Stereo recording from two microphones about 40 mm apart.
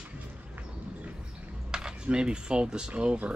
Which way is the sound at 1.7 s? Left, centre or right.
Centre.